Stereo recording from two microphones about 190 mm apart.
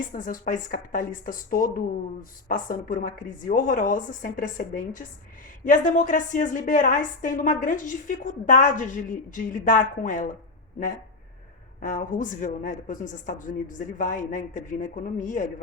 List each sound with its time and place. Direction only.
0.0 s a woman's voice: 45° left (ahead or behind)
11.8 s a woman's voice: 45° left (ahead or behind)